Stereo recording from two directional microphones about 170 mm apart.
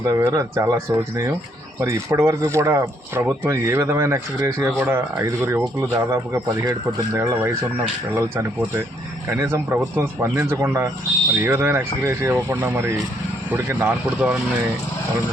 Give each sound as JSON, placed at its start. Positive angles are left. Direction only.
{"t": 0.1, "sound": "speech", "side_deg": -20}